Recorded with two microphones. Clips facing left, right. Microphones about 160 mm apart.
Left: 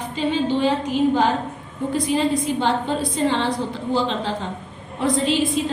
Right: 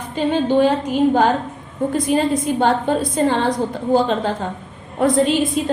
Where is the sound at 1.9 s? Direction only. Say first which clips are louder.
Right 2 dB; 50° right (ahead or behind).